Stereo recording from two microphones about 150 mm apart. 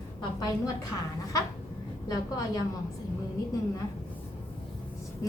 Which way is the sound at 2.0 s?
25° left (ahead or behind).